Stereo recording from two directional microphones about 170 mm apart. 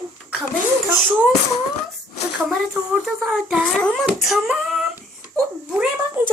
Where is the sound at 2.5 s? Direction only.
5° right (ahead or behind).